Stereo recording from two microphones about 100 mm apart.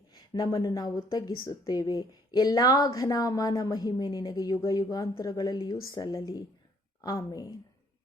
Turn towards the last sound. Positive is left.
turn(degrees=40)  # may be behind; listen again after turning